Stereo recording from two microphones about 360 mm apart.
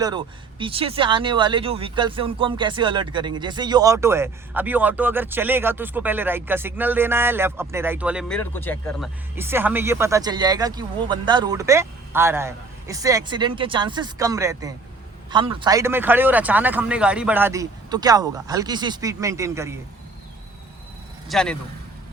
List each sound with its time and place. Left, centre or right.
0.0 s speech: centre
21.2 s speech: centre